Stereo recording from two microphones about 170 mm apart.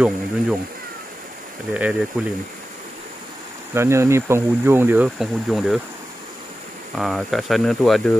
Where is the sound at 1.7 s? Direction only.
5° right (ahead or behind).